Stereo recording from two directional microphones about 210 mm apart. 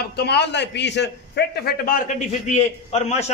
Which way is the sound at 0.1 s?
50° left (ahead or behind).